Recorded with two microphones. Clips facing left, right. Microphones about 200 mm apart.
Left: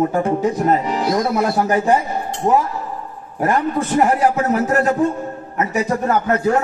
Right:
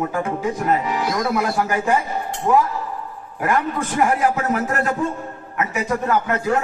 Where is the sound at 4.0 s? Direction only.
35° left (ahead or behind).